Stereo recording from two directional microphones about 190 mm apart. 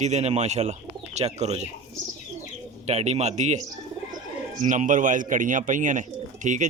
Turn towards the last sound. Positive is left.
turn(degrees=-40)  # may be behind; listen again after turning